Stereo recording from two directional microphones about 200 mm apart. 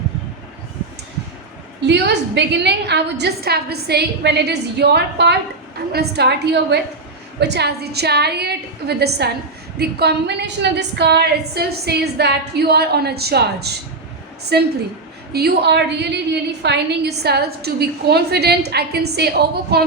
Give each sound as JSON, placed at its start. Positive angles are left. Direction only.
{"t": 1.9, "sound": "a woman's voice", "side_deg": -60}